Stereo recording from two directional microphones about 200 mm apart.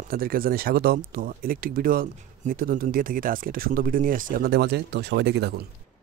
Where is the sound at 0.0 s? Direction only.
45° right (ahead or behind).